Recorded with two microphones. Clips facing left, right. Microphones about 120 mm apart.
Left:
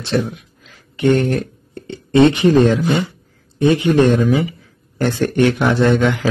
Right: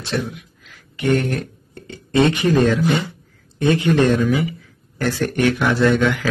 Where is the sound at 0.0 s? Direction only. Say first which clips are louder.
Left 5 dB; 30° left (ahead or behind).